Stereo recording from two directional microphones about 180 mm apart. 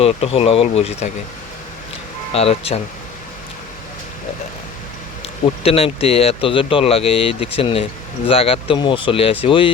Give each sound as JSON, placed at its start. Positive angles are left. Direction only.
{"t": 0.0, "sound": "speech", "side_deg": 35}
{"t": 2.3, "sound": "speech", "side_deg": 35}
{"t": 5.2, "sound": "speech", "side_deg": 35}